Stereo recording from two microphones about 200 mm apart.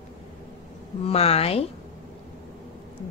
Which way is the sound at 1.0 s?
30° left (ahead or behind).